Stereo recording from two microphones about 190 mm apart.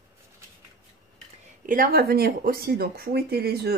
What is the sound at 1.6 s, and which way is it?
Speech, 50° right (ahead or behind).